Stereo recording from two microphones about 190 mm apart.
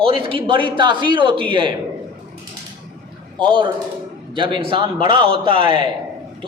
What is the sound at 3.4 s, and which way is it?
A man's voice, 25° right (ahead or behind).